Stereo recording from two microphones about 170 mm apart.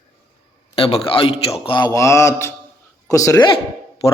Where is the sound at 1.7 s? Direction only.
25° left (ahead or behind).